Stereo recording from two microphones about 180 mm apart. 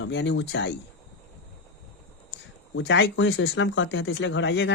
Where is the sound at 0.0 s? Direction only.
90° left.